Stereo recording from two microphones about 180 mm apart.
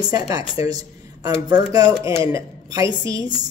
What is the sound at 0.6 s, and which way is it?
A woman's voice, 20° right (ahead or behind).